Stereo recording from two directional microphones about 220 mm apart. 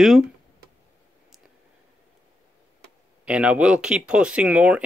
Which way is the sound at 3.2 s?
5° right (ahead or behind).